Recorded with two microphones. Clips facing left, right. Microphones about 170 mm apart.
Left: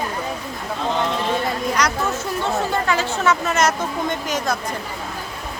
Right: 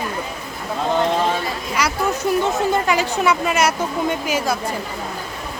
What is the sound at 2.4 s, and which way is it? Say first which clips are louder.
Speech: right 3 dB; 15° right (ahead or behind).